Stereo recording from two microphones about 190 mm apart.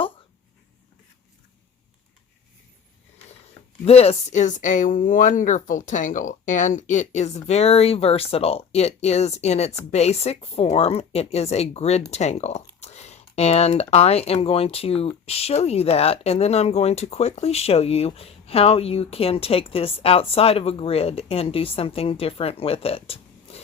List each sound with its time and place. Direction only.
3.8 s speech: 30° left (ahead or behind)